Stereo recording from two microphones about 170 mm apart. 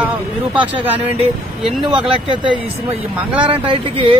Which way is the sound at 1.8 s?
30° right (ahead or behind).